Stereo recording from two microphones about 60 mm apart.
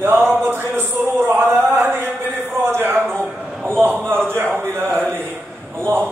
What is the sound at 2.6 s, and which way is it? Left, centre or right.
Speech, right.